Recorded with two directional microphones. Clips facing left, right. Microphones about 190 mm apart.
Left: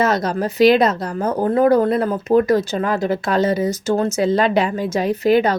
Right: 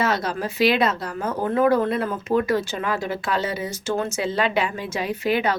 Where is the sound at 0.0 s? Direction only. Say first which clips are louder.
Left 5 dB; 40° left (ahead or behind).